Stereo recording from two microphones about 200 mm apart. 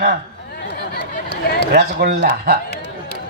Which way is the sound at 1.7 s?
50° right (ahead or behind).